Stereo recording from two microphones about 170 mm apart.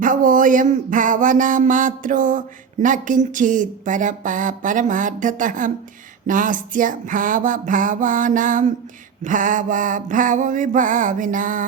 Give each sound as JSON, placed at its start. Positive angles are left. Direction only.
{"t": 0.0, "sound": "speech", "side_deg": -50}